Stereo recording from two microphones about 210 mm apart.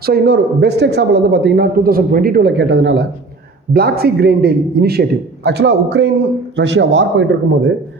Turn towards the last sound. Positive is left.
turn(degrees=-60)  # may be behind; listen again after turning